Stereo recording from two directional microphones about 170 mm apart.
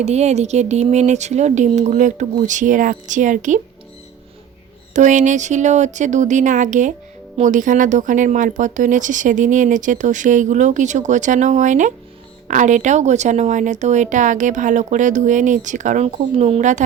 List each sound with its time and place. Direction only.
0.0 s speech: 40° right (ahead or behind)
4.9 s speech: 45° right (ahead or behind)